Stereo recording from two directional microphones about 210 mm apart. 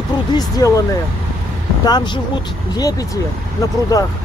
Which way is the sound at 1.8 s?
20° left (ahead or behind).